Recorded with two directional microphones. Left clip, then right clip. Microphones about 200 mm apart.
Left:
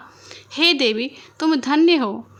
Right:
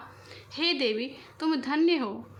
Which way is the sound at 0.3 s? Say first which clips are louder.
Left 11 dB; 50° left (ahead or behind).